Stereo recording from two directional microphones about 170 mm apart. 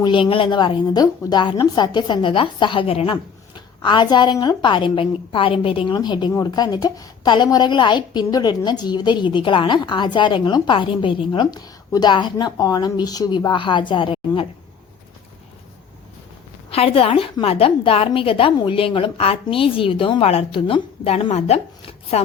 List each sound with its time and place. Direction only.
0.0 s a woman's voice: 30° left (ahead or behind)
16.6 s a woman's voice: 35° left (ahead or behind)